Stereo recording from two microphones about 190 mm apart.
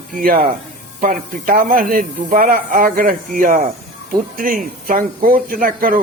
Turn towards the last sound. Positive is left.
turn(degrees=-45)  # may be behind; listen again after turning